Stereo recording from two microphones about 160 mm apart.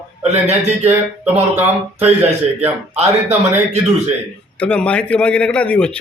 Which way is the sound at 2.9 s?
40° right (ahead or behind).